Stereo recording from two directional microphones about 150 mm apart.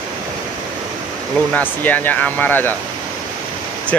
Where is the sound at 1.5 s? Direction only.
10° left (ahead or behind).